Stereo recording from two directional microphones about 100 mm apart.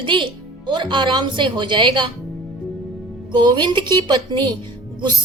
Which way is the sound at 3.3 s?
50° right (ahead or behind).